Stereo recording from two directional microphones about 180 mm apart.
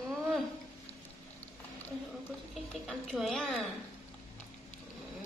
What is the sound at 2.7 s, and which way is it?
Speech, centre (ahead or behind).